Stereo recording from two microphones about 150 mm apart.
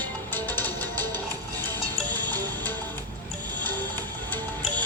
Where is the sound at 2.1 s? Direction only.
25° right (ahead or behind).